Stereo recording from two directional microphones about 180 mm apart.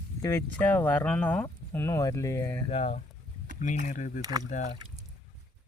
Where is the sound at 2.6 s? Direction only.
35° left (ahead or behind).